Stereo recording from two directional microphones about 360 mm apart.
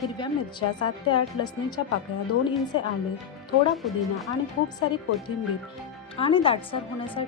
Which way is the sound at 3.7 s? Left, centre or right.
Centre.